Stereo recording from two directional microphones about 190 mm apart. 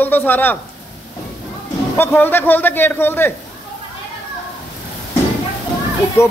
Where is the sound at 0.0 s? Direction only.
10° left (ahead or behind).